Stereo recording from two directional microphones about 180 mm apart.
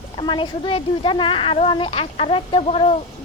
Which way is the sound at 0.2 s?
30° left (ahead or behind).